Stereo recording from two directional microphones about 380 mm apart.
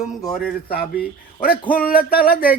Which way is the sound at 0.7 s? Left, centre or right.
Left.